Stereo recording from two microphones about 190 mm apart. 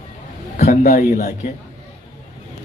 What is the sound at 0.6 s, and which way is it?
Speech, 40° left (ahead or behind).